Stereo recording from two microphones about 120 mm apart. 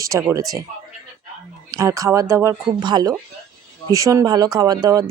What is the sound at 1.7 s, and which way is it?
Speech, 25° right (ahead or behind).